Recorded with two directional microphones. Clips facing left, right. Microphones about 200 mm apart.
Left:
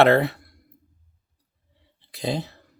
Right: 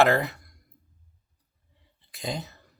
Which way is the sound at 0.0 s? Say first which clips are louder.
Left 5 dB; 35° left (ahead or behind).